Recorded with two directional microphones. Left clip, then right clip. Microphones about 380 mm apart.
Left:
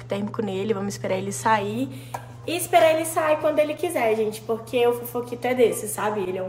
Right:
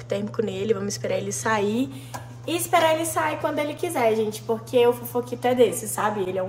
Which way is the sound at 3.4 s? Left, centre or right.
Centre.